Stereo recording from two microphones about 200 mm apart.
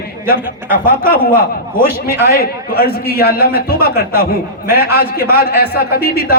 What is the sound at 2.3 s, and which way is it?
A man's voice, 50° left (ahead or behind).